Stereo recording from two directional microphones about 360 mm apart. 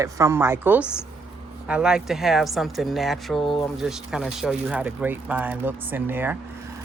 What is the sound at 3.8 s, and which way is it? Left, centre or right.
Speech, centre.